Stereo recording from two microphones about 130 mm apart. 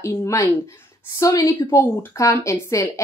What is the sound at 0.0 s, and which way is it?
A woman's voice, 20° left (ahead or behind).